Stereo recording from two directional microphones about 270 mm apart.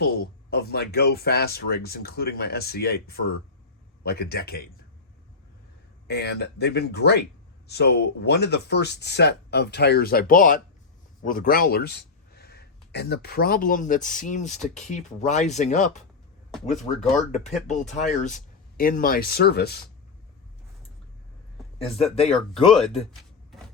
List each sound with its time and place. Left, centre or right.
0.0 s speech: left
6.1 s speech: left
21.9 s speech: left